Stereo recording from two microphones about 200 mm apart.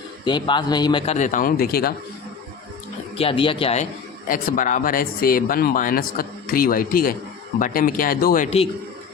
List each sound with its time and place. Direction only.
0.3 s a man's voice: 20° left (ahead or behind); by 1.9 s 50° left (ahead or behind)
3.2 s speech: 25° left (ahead or behind)
4.3 s speech: 45° left (ahead or behind)
8.4 s speech: 30° left (ahead or behind)